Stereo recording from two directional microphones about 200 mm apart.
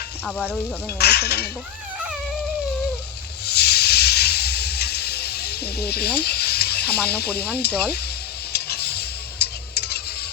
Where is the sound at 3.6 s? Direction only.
55° left (ahead or behind).